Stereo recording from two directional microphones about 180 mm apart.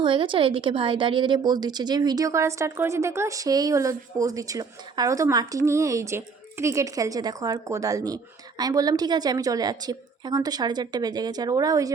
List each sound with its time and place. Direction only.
0.0 s a woman's voice: 30° right (ahead or behind)